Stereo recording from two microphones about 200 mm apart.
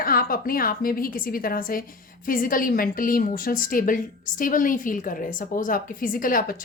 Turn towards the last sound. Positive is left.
turn(degrees=45)  # may be behind; listen again after turning